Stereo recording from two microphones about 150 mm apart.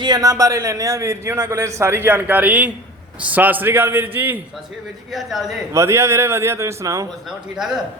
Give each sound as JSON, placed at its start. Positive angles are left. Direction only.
{"t": 0.0, "sound": "a man's voice", "side_deg": -25}
{"t": 5.1, "sound": "speech", "side_deg": 0}
{"t": 5.7, "sound": "a man's voice", "side_deg": -20}
{"t": 7.3, "sound": "speech", "side_deg": -5}